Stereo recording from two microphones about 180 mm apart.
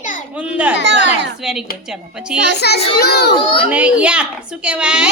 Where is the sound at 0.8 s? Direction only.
80° right.